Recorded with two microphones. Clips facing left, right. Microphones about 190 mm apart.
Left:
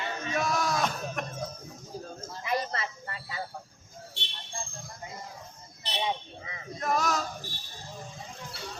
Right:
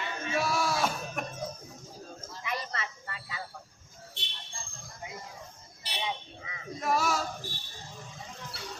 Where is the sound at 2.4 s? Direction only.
35° left (ahead or behind).